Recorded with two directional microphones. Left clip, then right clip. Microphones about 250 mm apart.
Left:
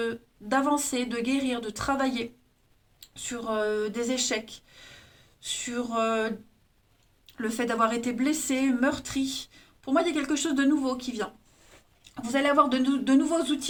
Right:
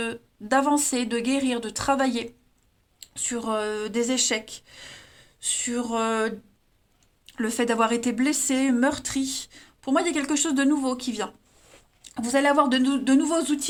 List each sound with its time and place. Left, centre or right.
0.0 s speech: right
7.3 s speech: right